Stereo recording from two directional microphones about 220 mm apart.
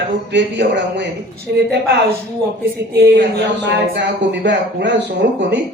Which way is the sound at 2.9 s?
50° right (ahead or behind).